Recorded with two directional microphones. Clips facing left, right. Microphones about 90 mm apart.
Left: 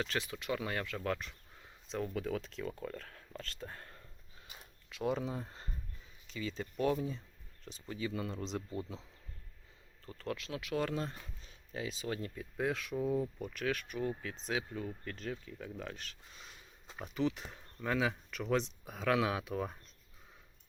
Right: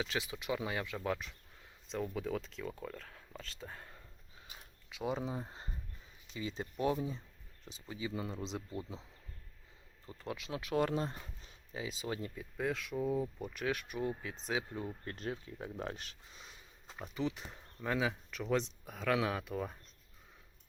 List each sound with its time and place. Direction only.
0.0 s speech: 5° right (ahead or behind)
10.1 s speech: 15° right (ahead or behind)
10.5 s speech: 25° right (ahead or behind)
11.7 s speech: 15° right (ahead or behind)
12.4 s speech: centre (ahead or behind); by 16.0 s 30° right (ahead or behind)
17.0 s speech: centre (ahead or behind)